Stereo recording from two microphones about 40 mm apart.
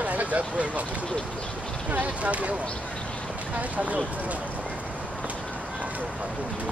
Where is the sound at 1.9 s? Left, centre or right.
Right.